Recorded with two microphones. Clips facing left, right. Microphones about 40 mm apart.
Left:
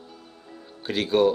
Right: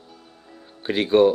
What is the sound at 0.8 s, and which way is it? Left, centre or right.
Speech, centre.